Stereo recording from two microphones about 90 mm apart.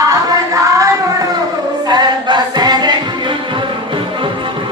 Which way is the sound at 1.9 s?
55° right (ahead or behind).